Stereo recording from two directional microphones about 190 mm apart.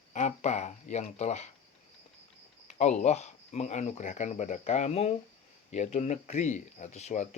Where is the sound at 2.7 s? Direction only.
40° left (ahead or behind).